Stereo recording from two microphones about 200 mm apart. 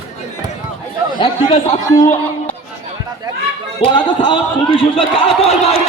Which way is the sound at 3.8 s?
25° left (ahead or behind).